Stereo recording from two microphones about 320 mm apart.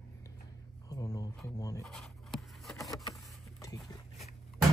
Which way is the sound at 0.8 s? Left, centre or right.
Centre.